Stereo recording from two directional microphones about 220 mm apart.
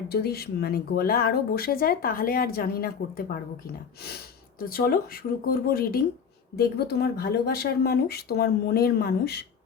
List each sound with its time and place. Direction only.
0.1 s speech: 45° left (ahead or behind)
4.7 s speech: 45° left (ahead or behind)